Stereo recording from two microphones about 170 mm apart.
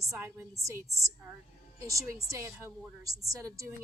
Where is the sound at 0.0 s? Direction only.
15° right (ahead or behind).